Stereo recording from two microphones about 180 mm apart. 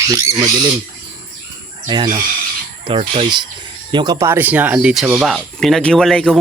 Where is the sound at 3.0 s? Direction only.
30° right (ahead or behind).